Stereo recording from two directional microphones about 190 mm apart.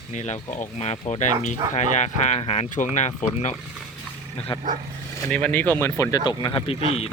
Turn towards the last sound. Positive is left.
turn(degrees=30)  # may be behind; listen again after turning